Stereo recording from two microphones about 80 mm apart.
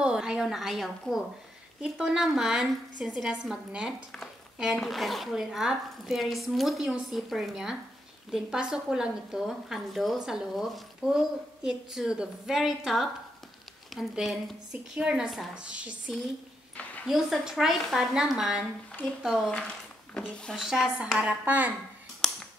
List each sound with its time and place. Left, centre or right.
0.0 s speech: centre
1.8 s speech: centre
4.7 s a woman's voice: centre
17.0 s a woman's voice: centre
20.2 s a woman's voice: centre
20.5 s speech: centre
21.0 s a woman's voice: centre
22.2 s music: centre